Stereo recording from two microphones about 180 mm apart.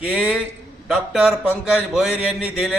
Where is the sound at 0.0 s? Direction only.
5° right (ahead or behind).